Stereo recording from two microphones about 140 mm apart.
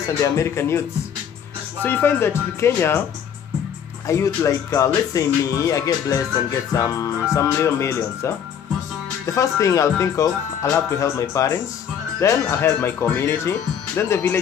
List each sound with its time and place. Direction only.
0.2 s speech: 20° left (ahead or behind)
4.1 s speech: 20° left (ahead or behind)